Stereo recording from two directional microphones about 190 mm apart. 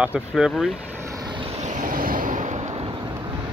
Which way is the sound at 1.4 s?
35° right (ahead or behind).